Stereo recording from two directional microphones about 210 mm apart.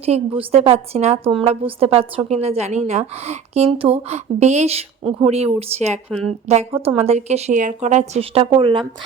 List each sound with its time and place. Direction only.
0.0 s a woman's voice: 30° right (ahead or behind)